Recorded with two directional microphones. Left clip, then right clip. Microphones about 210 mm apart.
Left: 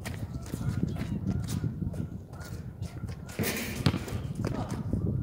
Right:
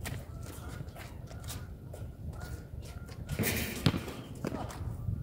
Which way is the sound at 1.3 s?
5° right (ahead or behind).